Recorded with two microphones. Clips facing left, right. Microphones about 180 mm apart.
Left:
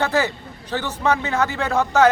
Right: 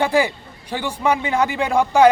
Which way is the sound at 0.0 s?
10° right (ahead or behind).